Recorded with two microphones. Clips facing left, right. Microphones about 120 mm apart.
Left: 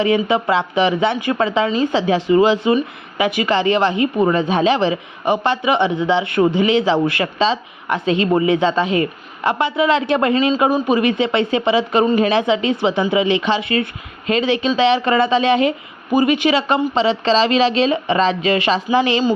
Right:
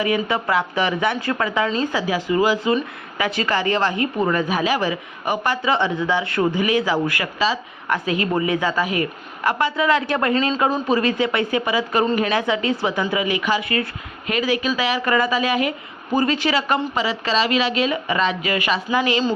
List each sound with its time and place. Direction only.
0.0 s speech: 25° left (ahead or behind)
10.3 s speech: 5° left (ahead or behind)
10.8 s speech: 20° left (ahead or behind)
16.1 s speech: 15° left (ahead or behind)